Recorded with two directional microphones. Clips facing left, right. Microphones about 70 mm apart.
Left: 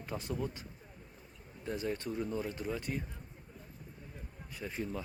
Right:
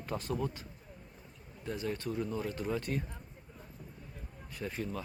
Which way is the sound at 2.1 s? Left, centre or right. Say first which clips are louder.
Right 1 dB; centre.